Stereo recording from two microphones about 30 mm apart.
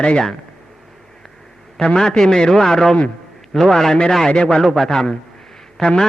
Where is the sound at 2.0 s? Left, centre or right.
Centre.